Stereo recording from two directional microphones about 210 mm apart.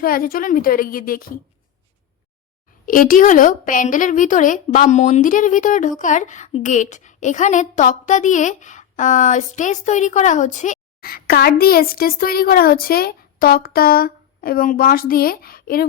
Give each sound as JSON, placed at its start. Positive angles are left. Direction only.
{"t": 0.0, "sound": "a woman's voice", "side_deg": 45}
{"t": 2.8, "sound": "a woman's voice", "side_deg": 40}